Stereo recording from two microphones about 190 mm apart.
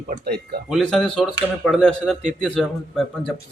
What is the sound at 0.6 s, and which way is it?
Speech, centre (ahead or behind).